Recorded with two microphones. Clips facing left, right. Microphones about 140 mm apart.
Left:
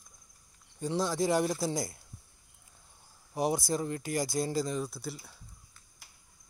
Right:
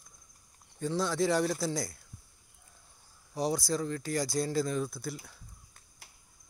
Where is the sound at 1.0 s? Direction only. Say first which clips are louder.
Even; 45° left (ahead or behind).